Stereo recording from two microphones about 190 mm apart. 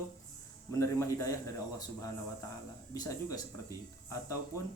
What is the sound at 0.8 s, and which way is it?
Speech, 15° left (ahead or behind).